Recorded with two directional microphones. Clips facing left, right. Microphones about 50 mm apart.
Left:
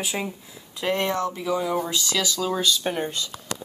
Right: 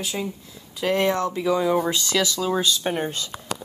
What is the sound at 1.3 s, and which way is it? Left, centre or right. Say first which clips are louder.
Speech: right 4 dB; right.